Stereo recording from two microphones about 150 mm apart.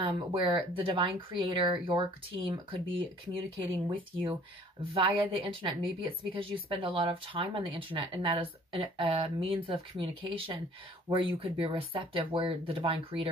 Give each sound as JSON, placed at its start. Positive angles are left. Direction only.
{"t": 0.0, "sound": "a woman's voice", "side_deg": -35}